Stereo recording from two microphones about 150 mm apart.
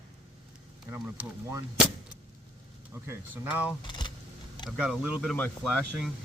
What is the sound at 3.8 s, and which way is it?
Vehicle, 30° left (ahead or behind).